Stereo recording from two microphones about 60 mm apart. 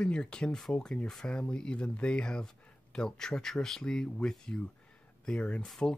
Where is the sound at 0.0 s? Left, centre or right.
Centre.